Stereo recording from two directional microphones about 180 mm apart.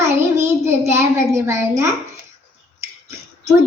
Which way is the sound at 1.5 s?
15° right (ahead or behind).